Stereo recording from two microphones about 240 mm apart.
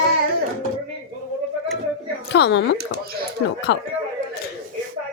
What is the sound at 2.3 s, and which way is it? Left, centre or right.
Speech, left.